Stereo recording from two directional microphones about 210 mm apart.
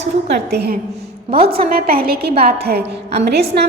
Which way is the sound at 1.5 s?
45° right (ahead or behind).